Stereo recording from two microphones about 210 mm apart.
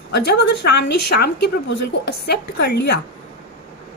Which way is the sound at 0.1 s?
55° left (ahead or behind).